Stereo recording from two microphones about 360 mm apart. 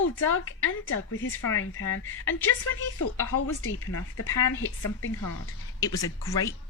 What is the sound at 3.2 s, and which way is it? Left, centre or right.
Speech, left.